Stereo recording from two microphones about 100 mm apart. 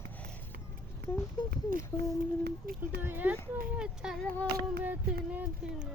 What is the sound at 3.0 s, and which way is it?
Speech, 20° right (ahead or behind).